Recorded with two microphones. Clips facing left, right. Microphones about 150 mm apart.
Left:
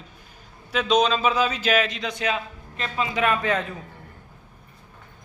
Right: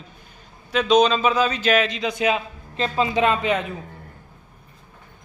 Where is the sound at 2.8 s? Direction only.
30° right (ahead or behind).